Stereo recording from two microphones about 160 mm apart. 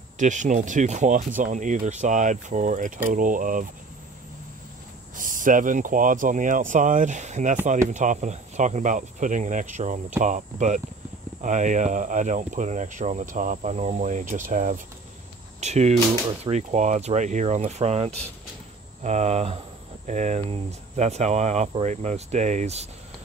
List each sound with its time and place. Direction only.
0.2 s speech: 50° right (ahead or behind)
5.1 s speech: 55° right (ahead or behind)